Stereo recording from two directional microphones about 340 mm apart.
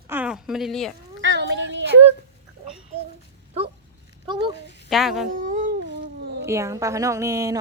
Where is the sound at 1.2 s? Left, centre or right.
Right.